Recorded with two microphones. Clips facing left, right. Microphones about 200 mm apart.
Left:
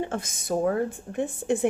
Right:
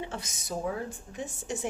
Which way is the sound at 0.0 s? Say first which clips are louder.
Left 8 dB; 50° left (ahead or behind).